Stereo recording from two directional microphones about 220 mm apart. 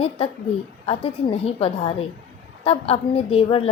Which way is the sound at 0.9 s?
25° left (ahead or behind).